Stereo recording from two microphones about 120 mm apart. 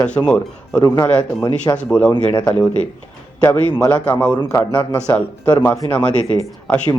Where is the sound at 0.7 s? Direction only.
35° left (ahead or behind).